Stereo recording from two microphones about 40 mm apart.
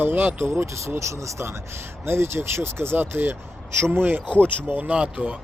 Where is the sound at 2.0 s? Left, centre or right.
Right.